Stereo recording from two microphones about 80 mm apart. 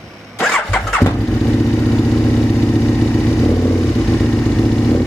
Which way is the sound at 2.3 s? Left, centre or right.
Left.